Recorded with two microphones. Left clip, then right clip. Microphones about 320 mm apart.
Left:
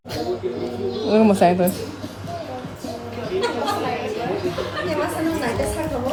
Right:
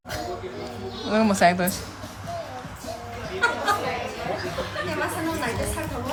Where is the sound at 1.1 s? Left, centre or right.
Centre.